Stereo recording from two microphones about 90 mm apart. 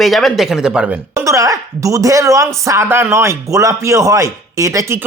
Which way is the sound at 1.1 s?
35° right (ahead or behind).